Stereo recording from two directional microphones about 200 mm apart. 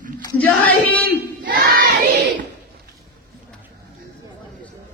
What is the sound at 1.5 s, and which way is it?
Crowd, 50° right (ahead or behind).